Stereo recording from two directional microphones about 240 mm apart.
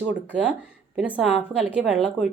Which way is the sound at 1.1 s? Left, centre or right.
Centre.